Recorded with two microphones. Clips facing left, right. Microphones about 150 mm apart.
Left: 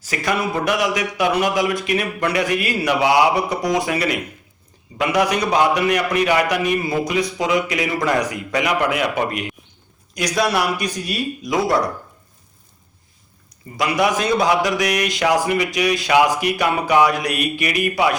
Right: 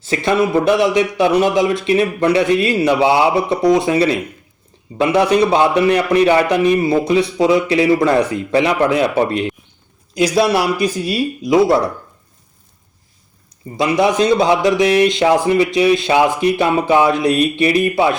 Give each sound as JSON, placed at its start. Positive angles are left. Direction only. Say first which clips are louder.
{"t": 0.0, "sound": "a man's voice", "louder": "right 6 dB", "side_deg": -25}
{"t": 13.7, "sound": "a man's voice", "louder": "right 5 dB", "side_deg": -25}